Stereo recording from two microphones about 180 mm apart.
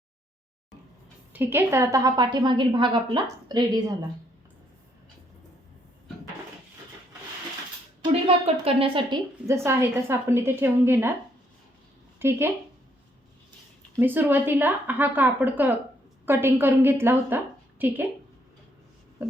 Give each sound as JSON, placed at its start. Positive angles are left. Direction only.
{"t": 1.3, "sound": "a woman's voice", "side_deg": -10}
{"t": 8.0, "sound": "a woman's voice", "side_deg": -30}
{"t": 9.5, "sound": "speech", "side_deg": -15}
{"t": 12.2, "sound": "speech", "side_deg": -15}
{"t": 13.9, "sound": "a woman's voice", "side_deg": -10}